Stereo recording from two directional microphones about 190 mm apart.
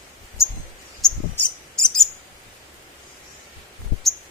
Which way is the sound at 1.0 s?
5° left (ahead or behind).